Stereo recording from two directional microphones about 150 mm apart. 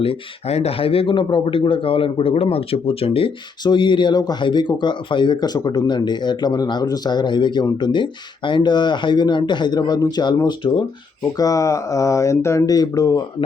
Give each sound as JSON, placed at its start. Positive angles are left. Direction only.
{"t": 0.5, "sound": "a man's voice", "side_deg": 40}